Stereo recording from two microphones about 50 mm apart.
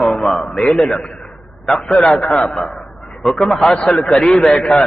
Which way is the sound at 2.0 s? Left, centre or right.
Centre.